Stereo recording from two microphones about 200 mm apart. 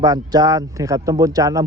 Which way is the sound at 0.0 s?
20° right (ahead or behind).